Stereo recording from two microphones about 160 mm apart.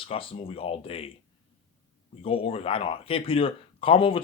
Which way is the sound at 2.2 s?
35° left (ahead or behind).